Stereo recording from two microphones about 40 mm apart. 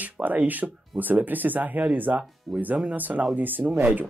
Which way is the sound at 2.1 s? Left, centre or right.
Right.